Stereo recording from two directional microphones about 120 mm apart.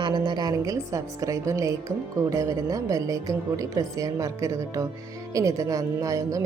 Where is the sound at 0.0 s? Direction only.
40° right (ahead or behind).